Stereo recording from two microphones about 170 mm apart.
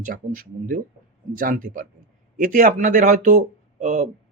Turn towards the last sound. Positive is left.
turn(degrees=-50)  # may be behind; listen again after turning